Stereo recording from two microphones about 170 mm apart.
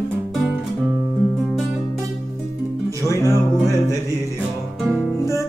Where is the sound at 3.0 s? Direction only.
15° left (ahead or behind).